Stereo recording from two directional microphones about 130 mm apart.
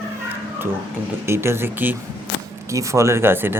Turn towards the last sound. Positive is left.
turn(degrees=-15)  # may be behind; listen again after turning